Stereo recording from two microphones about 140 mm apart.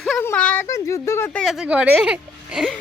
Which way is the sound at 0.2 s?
10° left (ahead or behind).